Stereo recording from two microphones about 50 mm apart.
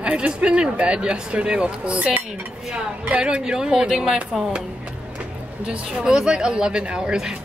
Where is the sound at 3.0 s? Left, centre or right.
Right.